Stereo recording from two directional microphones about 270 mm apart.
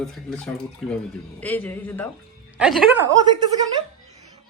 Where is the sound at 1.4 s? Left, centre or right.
Centre.